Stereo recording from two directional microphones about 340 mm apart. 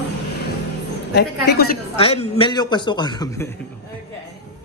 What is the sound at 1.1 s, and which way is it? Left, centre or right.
Speech, left.